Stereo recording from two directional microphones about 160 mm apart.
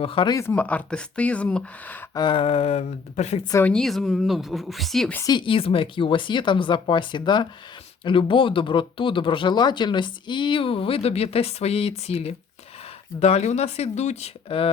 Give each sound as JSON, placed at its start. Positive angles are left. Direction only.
{"t": 0.0, "sound": "speech", "side_deg": 35}
{"t": 0.3, "sound": "speech", "side_deg": 15}
{"t": 2.1, "sound": "speech", "side_deg": 30}
{"t": 3.7, "sound": "speech", "side_deg": 5}
{"t": 5.2, "sound": "speech", "side_deg": 30}